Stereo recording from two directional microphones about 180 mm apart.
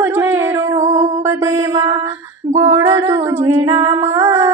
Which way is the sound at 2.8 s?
15° right (ahead or behind).